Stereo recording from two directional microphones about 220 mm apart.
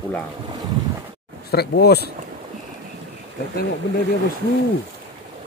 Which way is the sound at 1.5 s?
45° left (ahead or behind).